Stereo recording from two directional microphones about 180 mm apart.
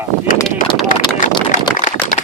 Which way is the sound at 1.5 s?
45° left (ahead or behind).